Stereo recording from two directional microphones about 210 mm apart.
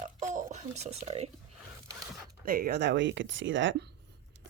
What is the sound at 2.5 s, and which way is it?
Speech, 45° right (ahead or behind).